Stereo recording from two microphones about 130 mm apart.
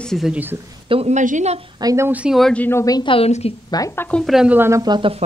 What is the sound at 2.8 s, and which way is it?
Speech, 30° left (ahead or behind).